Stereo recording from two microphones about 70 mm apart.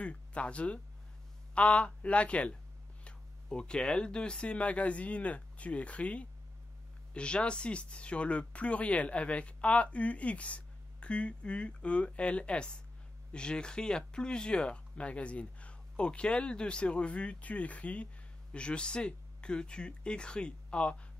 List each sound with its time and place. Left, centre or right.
0.0 s speech: centre